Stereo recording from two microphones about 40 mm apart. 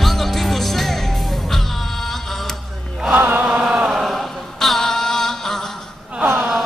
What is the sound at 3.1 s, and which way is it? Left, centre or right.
Chant, right.